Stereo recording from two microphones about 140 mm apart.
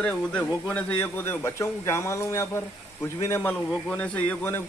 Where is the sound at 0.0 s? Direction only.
10° left (ahead or behind).